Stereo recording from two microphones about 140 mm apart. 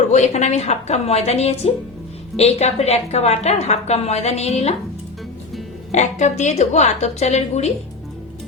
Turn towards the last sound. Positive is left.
turn(degrees=55)  # may be behind; listen again after turning